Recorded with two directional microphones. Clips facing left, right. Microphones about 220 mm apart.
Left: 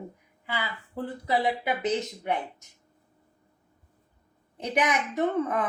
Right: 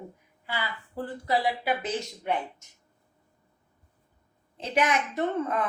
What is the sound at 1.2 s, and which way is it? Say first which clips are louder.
Speech: even; 20° left (ahead or behind).